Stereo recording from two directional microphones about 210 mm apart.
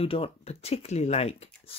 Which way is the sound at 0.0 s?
25° left (ahead or behind).